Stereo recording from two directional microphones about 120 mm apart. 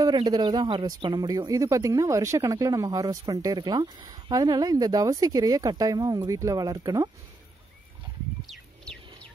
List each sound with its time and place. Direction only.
0.0 s speech: 35° right (ahead or behind)